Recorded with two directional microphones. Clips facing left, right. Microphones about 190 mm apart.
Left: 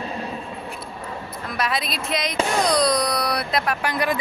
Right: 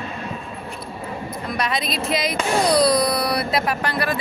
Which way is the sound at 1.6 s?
Centre (ahead or behind).